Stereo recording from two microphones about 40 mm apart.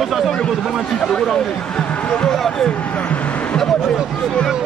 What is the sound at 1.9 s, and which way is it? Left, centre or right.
Speech, left.